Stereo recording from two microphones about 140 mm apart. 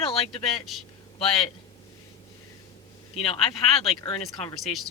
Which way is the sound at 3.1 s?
45° left (ahead or behind).